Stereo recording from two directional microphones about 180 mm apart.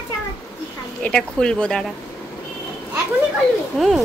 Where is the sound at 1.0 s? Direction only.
5° left (ahead or behind).